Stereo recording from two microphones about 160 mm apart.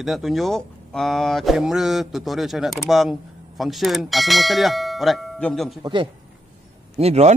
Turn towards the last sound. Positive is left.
turn(degrees=-40)  # may be behind; listen again after turning